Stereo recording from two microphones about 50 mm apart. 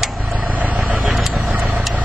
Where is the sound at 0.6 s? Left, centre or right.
Right.